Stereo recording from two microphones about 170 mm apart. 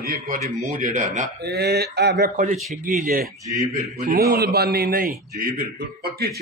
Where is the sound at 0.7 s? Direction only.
50° right (ahead or behind).